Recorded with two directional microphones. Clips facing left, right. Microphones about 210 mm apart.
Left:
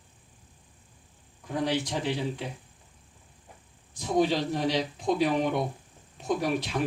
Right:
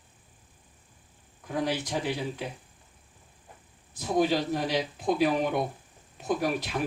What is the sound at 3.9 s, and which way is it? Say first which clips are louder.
Speech: even; 5° right (ahead or behind).